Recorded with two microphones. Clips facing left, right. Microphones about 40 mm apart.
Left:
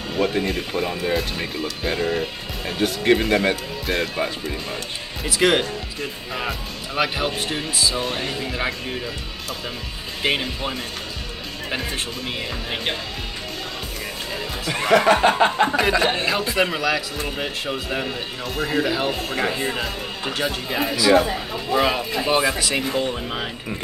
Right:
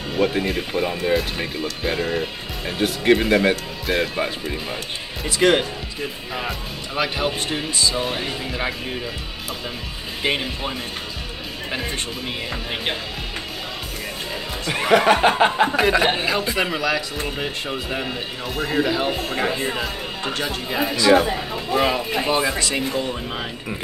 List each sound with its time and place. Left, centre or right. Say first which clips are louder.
0.1 s speech: right 1 dB; centre
10.2 s speech: left 1 dB; centre
14.7 s speech: even; centre
15.9 s speech: right 1 dB; centre
16.2 s speech: left 1 dB; centre